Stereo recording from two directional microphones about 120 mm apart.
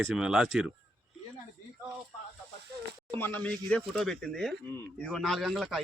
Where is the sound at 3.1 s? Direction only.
15° left (ahead or behind).